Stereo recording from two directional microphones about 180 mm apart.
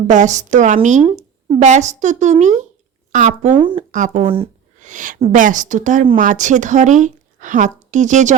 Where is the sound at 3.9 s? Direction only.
45° right (ahead or behind).